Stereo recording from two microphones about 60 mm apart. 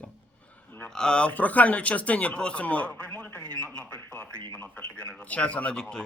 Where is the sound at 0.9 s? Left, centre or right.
Centre.